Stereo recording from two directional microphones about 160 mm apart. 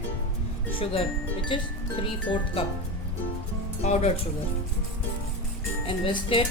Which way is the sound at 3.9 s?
45° left (ahead or behind).